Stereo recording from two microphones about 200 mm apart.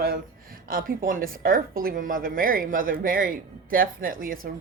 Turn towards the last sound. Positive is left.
turn(degrees=-45)  # may be behind; listen again after turning